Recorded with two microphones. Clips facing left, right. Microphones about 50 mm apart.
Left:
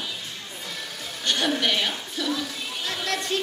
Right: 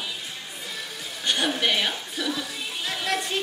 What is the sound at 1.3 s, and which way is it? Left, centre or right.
A woman's voice, centre.